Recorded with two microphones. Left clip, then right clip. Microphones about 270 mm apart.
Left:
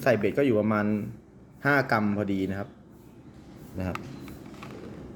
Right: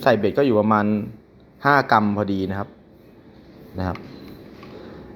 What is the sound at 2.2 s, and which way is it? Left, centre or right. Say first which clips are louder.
Speech: right 4 dB; right.